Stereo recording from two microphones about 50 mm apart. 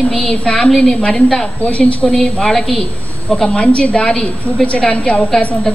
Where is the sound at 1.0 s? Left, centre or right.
Centre.